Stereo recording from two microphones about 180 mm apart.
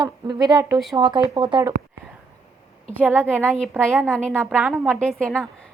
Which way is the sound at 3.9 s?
5° left (ahead or behind).